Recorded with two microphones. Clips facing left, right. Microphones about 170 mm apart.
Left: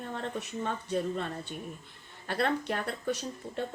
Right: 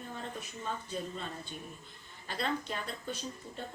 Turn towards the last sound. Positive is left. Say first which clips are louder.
# left 6 dB
turn(degrees=70)  # may be behind; listen again after turning